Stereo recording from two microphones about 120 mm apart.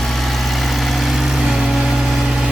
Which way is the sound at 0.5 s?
Centre (ahead or behind).